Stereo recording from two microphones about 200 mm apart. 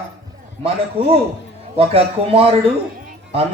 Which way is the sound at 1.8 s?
30° right (ahead or behind).